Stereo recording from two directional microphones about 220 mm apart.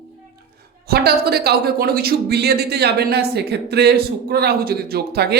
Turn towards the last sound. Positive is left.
turn(degrees=-45)  # may be behind; listen again after turning